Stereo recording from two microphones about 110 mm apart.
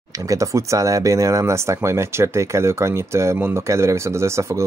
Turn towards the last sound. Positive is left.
turn(degrees=-25)  # may be behind; listen again after turning